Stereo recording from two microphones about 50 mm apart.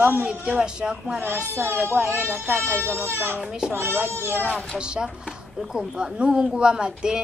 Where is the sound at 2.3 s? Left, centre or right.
Right.